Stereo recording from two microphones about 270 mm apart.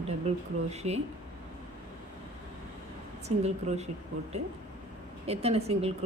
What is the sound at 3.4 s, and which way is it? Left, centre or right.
Speech, right.